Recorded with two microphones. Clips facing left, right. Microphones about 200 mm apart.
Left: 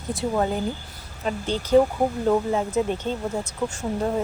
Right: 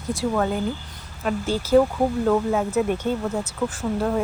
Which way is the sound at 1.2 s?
5° right (ahead or behind).